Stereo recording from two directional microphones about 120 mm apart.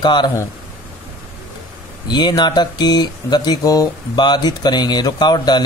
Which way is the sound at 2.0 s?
35° left (ahead or behind).